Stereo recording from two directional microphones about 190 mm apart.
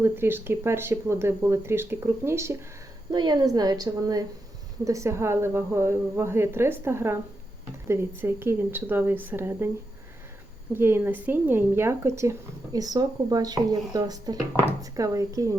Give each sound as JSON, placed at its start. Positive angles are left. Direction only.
{"t": 0.0, "sound": "a woman's voice", "side_deg": -10}
{"t": 10.8, "sound": "speech", "side_deg": -10}